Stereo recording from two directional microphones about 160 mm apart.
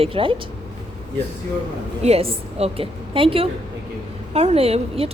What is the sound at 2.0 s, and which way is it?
A woman's voice, 40° right (ahead or behind).